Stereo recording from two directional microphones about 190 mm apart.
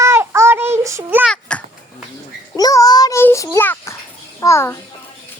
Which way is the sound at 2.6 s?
20° left (ahead or behind).